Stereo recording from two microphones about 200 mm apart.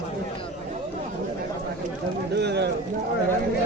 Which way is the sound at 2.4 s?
55° right (ahead or behind).